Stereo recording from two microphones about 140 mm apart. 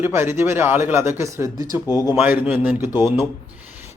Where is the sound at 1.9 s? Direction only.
20° left (ahead or behind).